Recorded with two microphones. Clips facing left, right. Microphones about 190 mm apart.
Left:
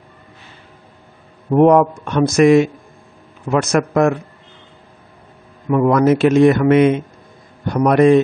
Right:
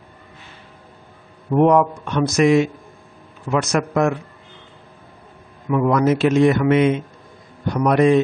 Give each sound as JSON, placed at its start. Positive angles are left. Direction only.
{"t": 1.5, "sound": "a man's voice", "side_deg": 45}
{"t": 3.7, "sound": "a man's voice", "side_deg": 50}
{"t": 5.7, "sound": "a man's voice", "side_deg": 50}